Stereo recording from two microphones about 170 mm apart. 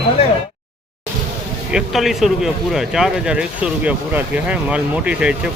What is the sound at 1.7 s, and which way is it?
Speech, centre (ahead or behind).